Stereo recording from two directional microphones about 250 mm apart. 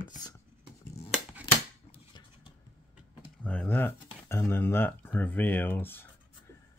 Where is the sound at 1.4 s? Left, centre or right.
Centre.